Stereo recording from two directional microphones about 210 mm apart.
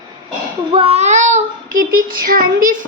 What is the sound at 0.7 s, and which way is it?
Child singing, 25° right (ahead or behind).